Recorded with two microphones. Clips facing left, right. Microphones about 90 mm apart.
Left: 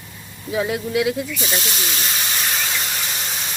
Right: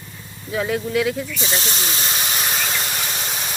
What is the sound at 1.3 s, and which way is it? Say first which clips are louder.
Snake: even; 25° right (ahead or behind).